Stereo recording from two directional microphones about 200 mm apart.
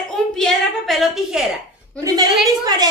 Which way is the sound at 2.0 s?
20° right (ahead or behind).